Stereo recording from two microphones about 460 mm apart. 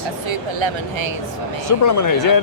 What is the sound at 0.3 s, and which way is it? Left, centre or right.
Speech, right.